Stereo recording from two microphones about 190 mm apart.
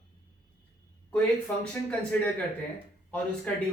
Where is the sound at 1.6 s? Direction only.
5° left (ahead or behind).